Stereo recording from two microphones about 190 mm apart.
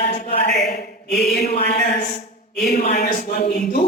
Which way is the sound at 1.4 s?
50° left (ahead or behind).